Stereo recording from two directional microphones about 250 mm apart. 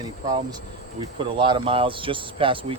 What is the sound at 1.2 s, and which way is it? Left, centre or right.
Speech, centre.